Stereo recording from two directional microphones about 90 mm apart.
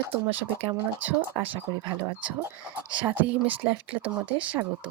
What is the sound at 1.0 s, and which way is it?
Speech, 20° right (ahead or behind).